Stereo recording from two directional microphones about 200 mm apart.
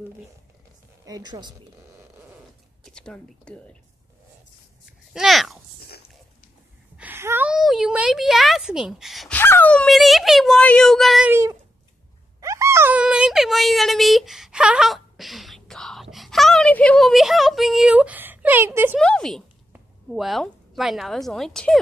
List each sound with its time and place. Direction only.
1.0 s a woman's voice: 20° right (ahead or behind)
2.8 s speech: 5° left (ahead or behind)
5.1 s speech: centre (ahead or behind)
7.0 s a sound: 10° right (ahead or behind)
9.4 s speech: 10° left (ahead or behind)
12.4 s a sound: 15° right (ahead or behind)
18.9 s a woman's voice: 5° left (ahead or behind)